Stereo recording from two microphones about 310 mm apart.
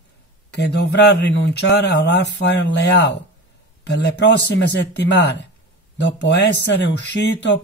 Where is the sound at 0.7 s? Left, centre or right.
Left.